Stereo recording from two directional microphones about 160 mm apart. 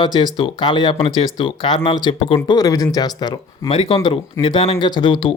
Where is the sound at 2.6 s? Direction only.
20° left (ahead or behind).